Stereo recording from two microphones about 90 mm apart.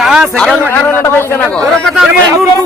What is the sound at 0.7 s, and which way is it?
Speech, 25° left (ahead or behind).